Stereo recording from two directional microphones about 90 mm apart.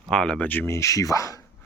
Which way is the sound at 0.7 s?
35° left (ahead or behind).